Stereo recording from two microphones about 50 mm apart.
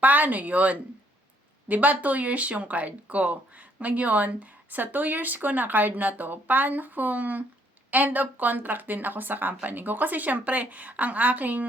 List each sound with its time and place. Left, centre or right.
0.0 s speech: right